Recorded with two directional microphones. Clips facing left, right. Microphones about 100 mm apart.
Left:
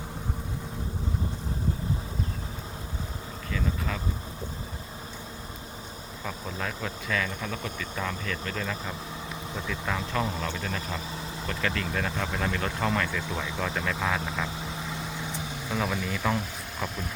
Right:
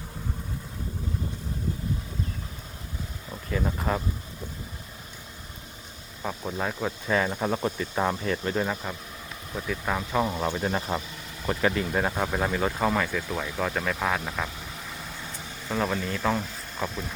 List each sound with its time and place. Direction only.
3.5 s speech: 40° right (ahead or behind)
6.2 s speech: 10° right (ahead or behind)
7.1 s speech: 40° right (ahead or behind)
9.6 s speech: 10° right (ahead or behind)
10.6 s speech: 35° right (ahead or behind)
11.4 s speech: 20° right (ahead or behind)
15.7 s speech: 5° left (ahead or behind)